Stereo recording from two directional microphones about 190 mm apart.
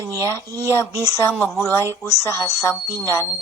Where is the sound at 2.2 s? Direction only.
15° left (ahead or behind).